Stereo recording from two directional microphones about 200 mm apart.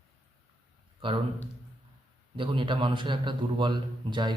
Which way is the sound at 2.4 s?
25° right (ahead or behind).